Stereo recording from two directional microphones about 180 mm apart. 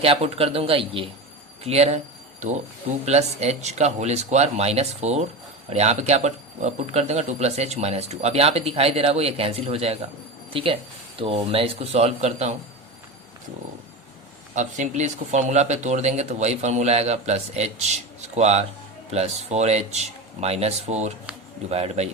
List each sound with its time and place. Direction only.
0.0 s speech: 35° right (ahead or behind)
3.1 s speech: 35° right (ahead or behind)
14.5 s speech: 40° right (ahead or behind)